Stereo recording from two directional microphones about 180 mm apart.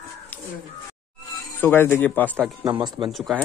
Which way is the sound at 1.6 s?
10° left (ahead or behind).